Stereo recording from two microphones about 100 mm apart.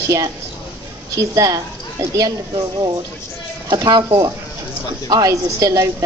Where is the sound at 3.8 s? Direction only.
45° right (ahead or behind).